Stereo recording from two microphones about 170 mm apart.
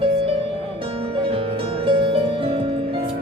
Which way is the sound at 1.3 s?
30° right (ahead or behind).